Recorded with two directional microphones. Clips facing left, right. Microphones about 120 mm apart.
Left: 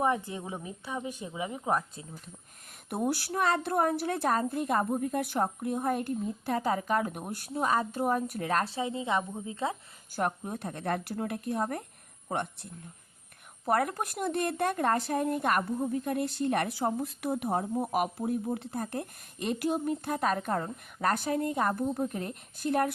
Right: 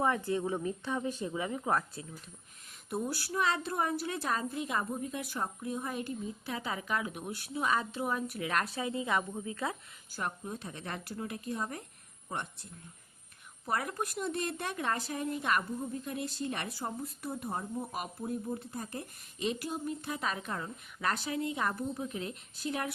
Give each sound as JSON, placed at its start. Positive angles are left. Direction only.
{"t": 0.0, "sound": "a woman's voice", "side_deg": 20}
{"t": 2.9, "sound": "a woman's voice", "side_deg": 65}
{"t": 10.1, "sound": "a woman's voice", "side_deg": 60}